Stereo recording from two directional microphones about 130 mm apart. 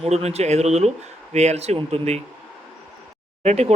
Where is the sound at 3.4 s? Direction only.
55° right (ahead or behind).